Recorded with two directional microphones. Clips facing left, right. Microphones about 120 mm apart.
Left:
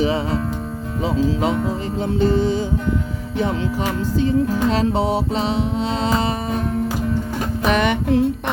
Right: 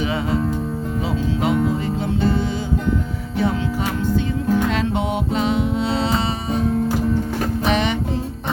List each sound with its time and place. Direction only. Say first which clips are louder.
2.1 s music: left 5 dB; 40° left (ahead or behind)
4.2 s music: left 6 dB; 35° left (ahead or behind)
7.7 s music: left 5 dB; 50° left (ahead or behind)